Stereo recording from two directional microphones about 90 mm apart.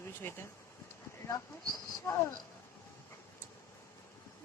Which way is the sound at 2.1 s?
35° left (ahead or behind).